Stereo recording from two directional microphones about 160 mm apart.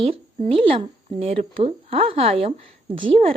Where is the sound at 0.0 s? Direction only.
35° right (ahead or behind).